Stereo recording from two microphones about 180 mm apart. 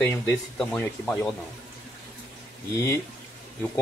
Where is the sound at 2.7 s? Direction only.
15° left (ahead or behind).